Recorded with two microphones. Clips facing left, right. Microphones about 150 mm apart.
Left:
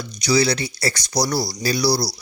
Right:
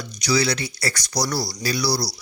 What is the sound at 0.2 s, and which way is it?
Speech, 25° left (ahead or behind).